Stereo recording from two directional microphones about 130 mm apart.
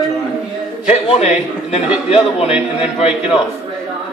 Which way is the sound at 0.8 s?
55° left (ahead or behind).